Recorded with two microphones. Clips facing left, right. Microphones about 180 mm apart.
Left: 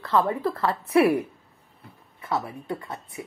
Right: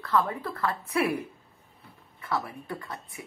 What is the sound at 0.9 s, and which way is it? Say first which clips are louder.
Speech: left 9 dB; 90° left.